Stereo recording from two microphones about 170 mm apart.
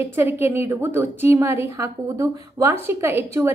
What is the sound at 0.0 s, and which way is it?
A woman's voice, 15° right (ahead or behind).